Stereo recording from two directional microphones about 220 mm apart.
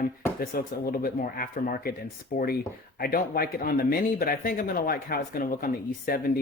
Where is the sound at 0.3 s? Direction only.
40° left (ahead or behind).